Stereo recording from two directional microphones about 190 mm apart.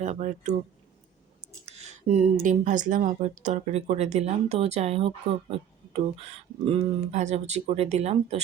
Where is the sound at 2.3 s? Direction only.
45° right (ahead or behind).